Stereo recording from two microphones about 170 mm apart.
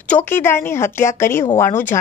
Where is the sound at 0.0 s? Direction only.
10° left (ahead or behind).